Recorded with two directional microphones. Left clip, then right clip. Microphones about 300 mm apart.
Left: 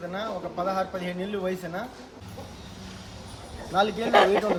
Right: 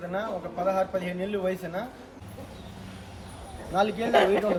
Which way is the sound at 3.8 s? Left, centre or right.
Centre.